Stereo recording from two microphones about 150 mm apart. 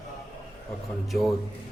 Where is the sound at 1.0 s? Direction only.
Centre (ahead or behind).